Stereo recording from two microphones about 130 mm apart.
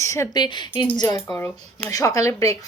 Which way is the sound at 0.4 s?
35° left (ahead or behind).